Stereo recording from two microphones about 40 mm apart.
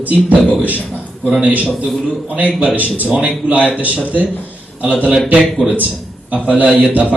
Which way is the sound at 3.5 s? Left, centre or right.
Right.